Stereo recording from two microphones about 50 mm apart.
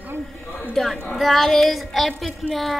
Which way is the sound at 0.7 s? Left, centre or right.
Centre.